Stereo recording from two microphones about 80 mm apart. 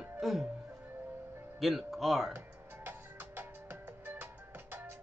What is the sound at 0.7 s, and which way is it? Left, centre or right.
Music, right.